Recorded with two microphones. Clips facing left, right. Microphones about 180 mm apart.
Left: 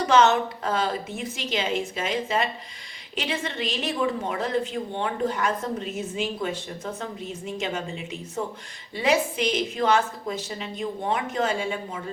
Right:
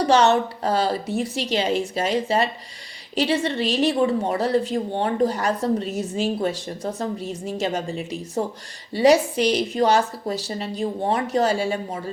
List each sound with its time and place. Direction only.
0.0 s a woman's voice: 35° right (ahead or behind)